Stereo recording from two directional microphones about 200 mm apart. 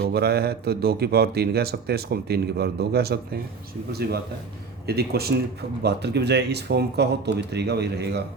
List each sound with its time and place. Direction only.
0.0 s speech: 50° right (ahead or behind)